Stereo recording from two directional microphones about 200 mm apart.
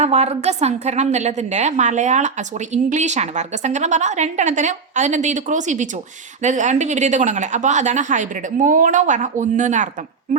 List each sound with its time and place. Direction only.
0.0 s a woman's voice: 35° right (ahead or behind)